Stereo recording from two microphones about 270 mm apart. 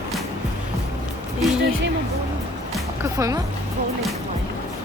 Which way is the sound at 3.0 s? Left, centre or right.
Centre.